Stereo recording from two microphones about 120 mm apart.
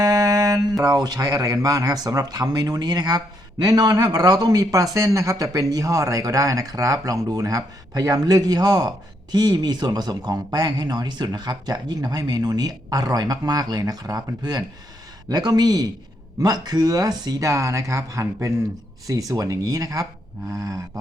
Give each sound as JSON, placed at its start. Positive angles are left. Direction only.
{"t": 0.0, "sound": "speech", "side_deg": -35}